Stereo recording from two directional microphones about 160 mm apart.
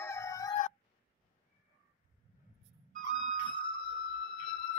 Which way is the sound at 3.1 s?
30° left (ahead or behind).